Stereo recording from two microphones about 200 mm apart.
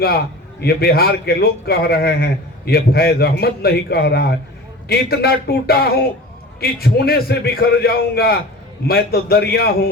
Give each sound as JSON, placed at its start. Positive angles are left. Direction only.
{"t": 0.6, "sound": "a man's voice", "side_deg": 50}